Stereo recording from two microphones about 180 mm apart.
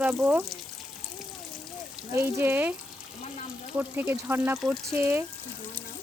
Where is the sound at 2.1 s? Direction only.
10° right (ahead or behind).